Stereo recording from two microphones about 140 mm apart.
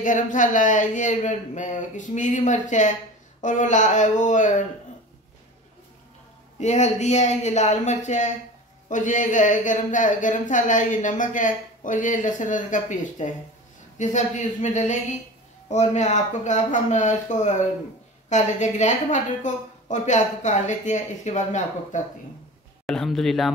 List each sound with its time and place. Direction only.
0.0 s speech: 70° left (ahead or behind)
6.6 s speech: 55° left (ahead or behind)
22.8 s speech: centre (ahead or behind)